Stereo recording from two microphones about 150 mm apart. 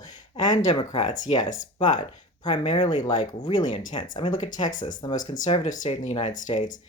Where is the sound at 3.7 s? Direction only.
30° left (ahead or behind).